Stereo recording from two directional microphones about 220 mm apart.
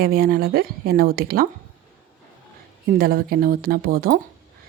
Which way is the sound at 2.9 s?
40° right (ahead or behind).